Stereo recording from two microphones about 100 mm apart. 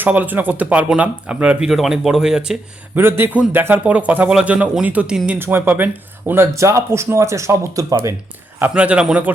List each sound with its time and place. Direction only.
0.0 s speech: 15° right (ahead or behind)
2.9 s speech: 20° right (ahead or behind)
8.5 s speech: 15° right (ahead or behind)